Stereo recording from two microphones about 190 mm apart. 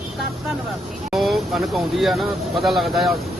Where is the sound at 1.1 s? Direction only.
Centre (ahead or behind).